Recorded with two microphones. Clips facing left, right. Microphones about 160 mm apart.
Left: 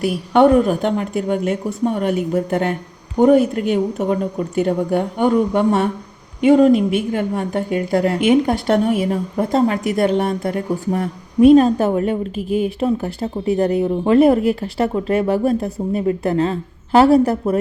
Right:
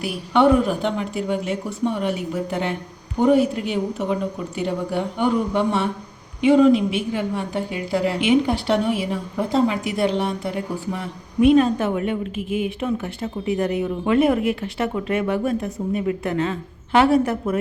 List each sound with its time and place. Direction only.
0.0 s a woman's voice: 45° left (ahead or behind)